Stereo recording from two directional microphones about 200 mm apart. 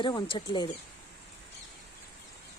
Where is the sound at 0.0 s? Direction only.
25° left (ahead or behind).